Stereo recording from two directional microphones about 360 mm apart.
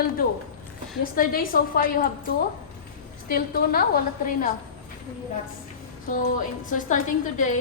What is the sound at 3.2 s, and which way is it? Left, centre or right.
A woman's voice, left.